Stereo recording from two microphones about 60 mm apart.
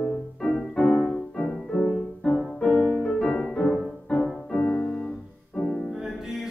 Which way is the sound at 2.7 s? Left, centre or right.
Left.